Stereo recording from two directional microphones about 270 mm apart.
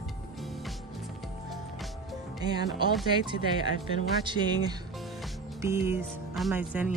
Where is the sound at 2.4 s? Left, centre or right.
Centre.